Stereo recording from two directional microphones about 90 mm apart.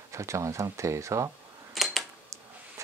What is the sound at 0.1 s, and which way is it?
Speech, 35° right (ahead or behind).